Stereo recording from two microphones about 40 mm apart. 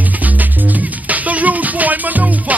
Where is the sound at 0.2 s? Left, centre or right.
Right.